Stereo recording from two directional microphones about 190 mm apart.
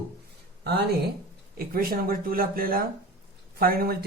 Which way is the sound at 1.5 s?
50° right (ahead or behind).